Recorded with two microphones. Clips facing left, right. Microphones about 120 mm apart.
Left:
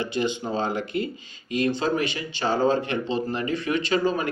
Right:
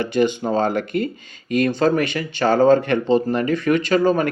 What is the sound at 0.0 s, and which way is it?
Speech, 55° right (ahead or behind).